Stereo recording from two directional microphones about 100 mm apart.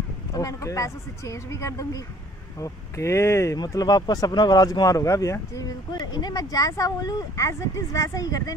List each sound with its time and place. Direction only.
0.3 s speech: 35° left (ahead or behind)
3.5 s speech: 45° left (ahead or behind)